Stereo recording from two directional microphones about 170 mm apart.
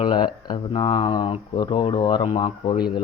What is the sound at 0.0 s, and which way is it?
Speech, 30° left (ahead or behind).